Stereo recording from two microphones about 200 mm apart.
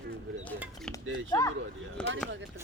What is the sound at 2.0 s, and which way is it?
Speech, 5° left (ahead or behind).